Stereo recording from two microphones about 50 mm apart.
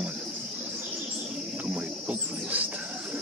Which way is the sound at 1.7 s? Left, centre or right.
Right.